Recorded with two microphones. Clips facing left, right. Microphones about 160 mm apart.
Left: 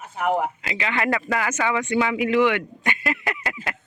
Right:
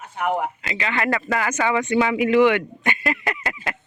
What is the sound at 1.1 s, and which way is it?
Speech, centre (ahead or behind).